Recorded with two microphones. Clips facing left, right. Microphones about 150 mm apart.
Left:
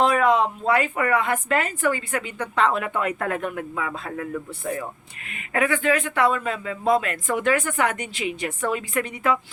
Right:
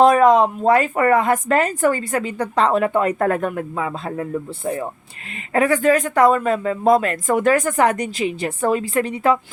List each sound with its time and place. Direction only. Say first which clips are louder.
0.0 s speech: right 7 dB; 40° right (ahead or behind)
5.5 s speech: right 6 dB; 40° right (ahead or behind)